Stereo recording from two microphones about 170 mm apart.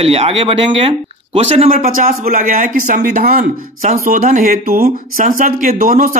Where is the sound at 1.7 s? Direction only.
50° right (ahead or behind).